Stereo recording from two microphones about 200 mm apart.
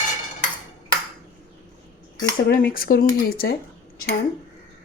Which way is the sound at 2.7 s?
45° left (ahead or behind).